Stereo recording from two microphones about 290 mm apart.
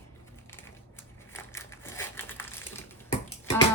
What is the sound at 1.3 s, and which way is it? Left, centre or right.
Crushing, centre.